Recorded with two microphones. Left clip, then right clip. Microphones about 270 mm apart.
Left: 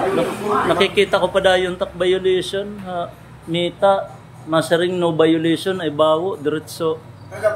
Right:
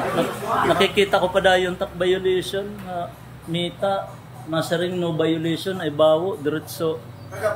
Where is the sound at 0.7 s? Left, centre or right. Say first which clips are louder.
Left 2 dB; centre.